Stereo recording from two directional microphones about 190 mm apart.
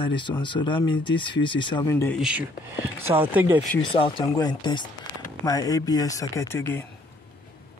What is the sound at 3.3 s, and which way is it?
Speech, 10° right (ahead or behind).